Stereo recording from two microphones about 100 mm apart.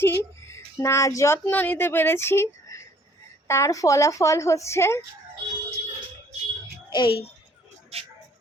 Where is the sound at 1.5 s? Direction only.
20° left (ahead or behind).